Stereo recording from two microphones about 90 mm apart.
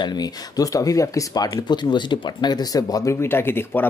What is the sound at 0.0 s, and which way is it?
Speech, 50° left (ahead or behind).